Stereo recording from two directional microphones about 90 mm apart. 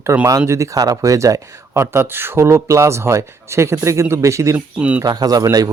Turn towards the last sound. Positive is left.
turn(degrees=-45)  # may be behind; listen again after turning